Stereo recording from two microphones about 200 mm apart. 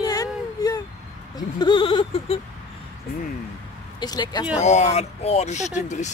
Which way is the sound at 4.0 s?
20° left (ahead or behind).